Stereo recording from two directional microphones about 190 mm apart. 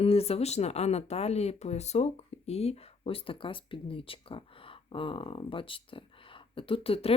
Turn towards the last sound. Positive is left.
turn(degrees=30)  # may be behind; listen again after turning